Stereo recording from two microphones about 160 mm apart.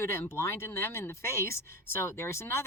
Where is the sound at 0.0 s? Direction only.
15° left (ahead or behind).